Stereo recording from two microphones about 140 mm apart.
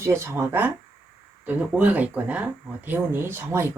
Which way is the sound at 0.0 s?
20° right (ahead or behind).